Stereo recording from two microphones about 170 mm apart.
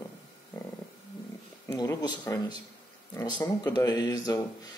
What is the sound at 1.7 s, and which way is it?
Speech, 25° left (ahead or behind).